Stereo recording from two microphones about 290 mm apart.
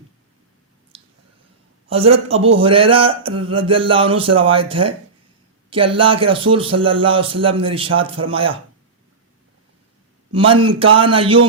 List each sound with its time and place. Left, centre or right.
0.9 s a sound: centre
1.9 s speech: centre
10.3 s speech: centre